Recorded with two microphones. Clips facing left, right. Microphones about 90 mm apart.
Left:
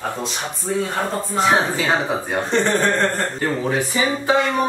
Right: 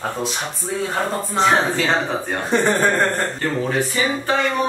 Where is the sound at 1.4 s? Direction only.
10° left (ahead or behind).